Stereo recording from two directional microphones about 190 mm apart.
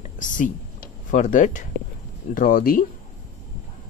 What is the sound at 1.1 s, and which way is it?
Speech, 40° left (ahead or behind).